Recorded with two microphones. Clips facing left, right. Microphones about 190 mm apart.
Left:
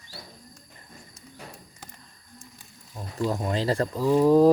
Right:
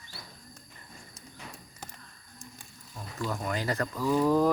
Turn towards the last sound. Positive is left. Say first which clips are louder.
# left 7 dB
turn(degrees=30)  # may be behind; listen again after turning